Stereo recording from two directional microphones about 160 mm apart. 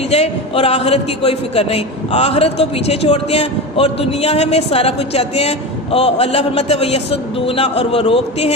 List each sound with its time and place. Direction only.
0.1 s a man's voice: 40° left (ahead or behind)